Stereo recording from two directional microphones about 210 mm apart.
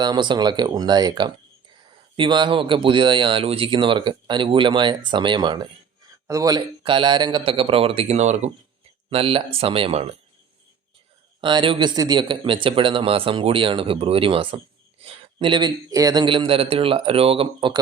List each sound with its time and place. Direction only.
0.0 s speech: 20° right (ahead or behind)
11.3 s speech: 25° right (ahead or behind)